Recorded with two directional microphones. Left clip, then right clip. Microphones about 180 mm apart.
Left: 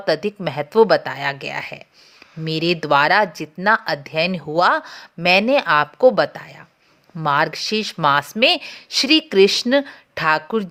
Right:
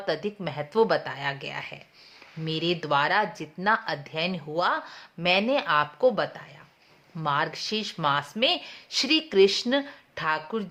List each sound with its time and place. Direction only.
0.0 s speech: 35° left (ahead or behind)